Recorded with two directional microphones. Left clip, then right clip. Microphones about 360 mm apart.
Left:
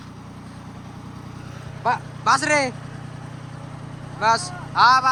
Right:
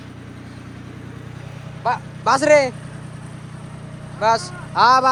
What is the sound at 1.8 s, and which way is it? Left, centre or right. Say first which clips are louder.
Speech: right 1 dB; centre.